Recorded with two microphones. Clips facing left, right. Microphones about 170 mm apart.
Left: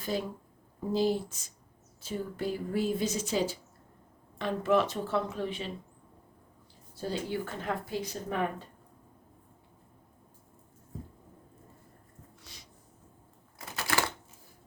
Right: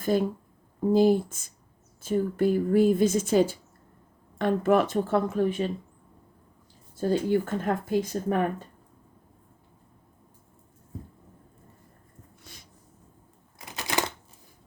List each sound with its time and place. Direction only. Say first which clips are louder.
0.0 s speech: right 8 dB; 50° right (ahead or behind)
6.9 s speech: right 9 dB; 50° right (ahead or behind)
12.4 s a sound: right 5 dB; 50° right (ahead or behind)
13.6 s typewriter: right 2 dB; 20° right (ahead or behind)